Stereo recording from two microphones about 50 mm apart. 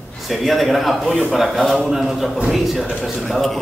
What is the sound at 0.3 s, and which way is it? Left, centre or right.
A man's voice, centre.